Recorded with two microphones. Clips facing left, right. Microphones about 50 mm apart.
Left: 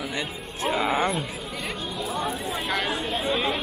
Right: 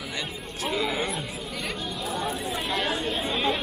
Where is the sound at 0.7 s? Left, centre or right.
Left.